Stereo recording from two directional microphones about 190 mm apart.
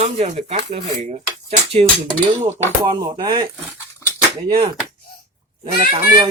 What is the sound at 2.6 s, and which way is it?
Music, 15° right (ahead or behind).